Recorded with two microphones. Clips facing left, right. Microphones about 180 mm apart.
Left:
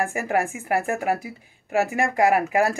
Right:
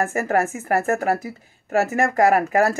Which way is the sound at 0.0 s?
15° left (ahead or behind).